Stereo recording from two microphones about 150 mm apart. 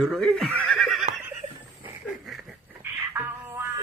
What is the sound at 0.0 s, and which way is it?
Speech, 5° left (ahead or behind).